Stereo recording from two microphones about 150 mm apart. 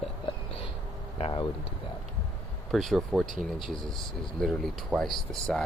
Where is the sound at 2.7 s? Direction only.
Centre (ahead or behind).